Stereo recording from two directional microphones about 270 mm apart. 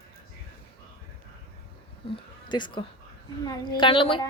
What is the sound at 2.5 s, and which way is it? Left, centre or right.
Speech, centre.